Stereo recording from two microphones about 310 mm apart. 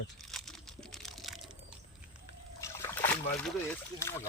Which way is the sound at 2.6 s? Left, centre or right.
Centre.